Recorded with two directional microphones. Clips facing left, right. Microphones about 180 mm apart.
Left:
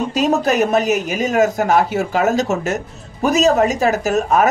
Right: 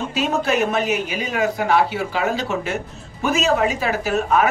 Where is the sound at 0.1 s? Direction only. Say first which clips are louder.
Left 3 dB; 40° left (ahead or behind).